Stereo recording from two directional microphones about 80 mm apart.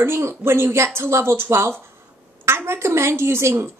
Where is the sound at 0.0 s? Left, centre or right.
Right.